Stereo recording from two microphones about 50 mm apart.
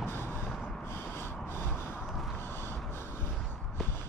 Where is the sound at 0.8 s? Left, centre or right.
Left.